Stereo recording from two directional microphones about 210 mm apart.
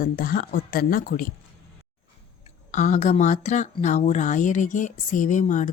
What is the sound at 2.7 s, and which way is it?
Speech, 35° left (ahead or behind).